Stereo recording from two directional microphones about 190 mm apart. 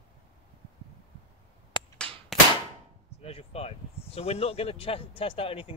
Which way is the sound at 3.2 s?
35° left (ahead or behind).